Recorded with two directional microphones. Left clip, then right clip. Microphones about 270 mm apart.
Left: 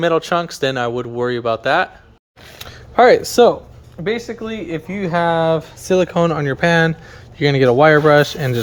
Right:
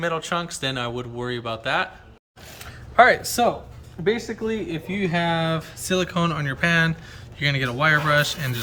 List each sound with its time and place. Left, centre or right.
0.0 s speech: left
2.6 s a sound: left
4.0 s speech: left
5.0 s speech: centre